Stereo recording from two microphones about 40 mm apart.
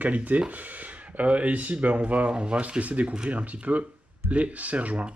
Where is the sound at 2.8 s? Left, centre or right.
Right.